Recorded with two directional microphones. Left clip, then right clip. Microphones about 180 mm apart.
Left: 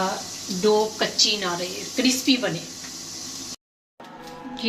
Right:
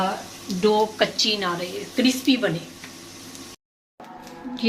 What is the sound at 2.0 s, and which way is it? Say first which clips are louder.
Speech: even; 25° right (ahead or behind).